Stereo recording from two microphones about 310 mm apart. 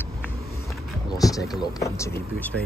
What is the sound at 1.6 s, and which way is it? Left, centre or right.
Speech, centre.